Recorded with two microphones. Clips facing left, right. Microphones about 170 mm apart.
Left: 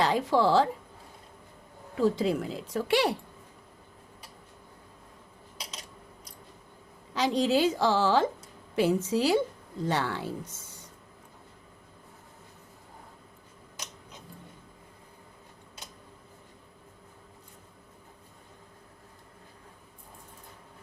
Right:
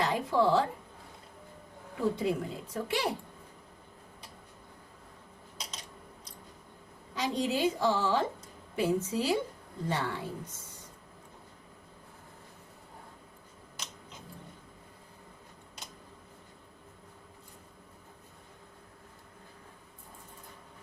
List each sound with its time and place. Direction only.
0.0 s a woman's voice: 90° left
2.0 s speech: 90° left
7.1 s speech: 90° left